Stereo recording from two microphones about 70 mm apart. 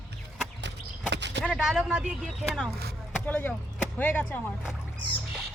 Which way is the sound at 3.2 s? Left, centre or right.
Left.